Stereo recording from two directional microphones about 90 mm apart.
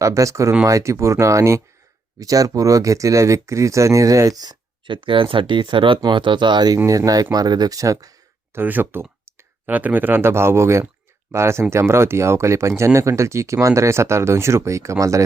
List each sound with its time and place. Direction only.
0.0 s speech: 35° right (ahead or behind)
4.9 s speech: 70° right (ahead or behind); by 6.7 s 55° right (ahead or behind)
6.8 s speech: 40° right (ahead or behind)
8.5 s speech: 20° right (ahead or behind)